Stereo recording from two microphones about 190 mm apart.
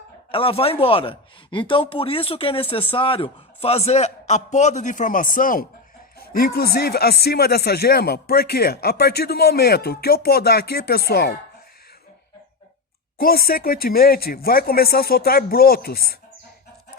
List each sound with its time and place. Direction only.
0.3 s a man's voice: 30° left (ahead or behind); by 11.3 s 55° left (ahead or behind)
13.1 s speech: 50° left (ahead or behind)